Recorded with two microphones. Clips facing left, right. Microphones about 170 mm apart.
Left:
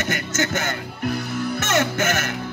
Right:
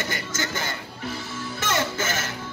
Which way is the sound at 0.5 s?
65° left (ahead or behind).